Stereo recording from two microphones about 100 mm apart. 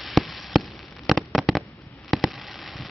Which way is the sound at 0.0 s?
Centre (ahead or behind).